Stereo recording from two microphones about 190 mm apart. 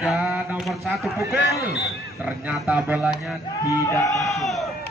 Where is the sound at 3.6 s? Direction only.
15° left (ahead or behind).